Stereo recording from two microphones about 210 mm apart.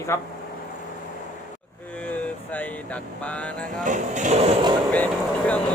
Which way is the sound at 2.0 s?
10° left (ahead or behind).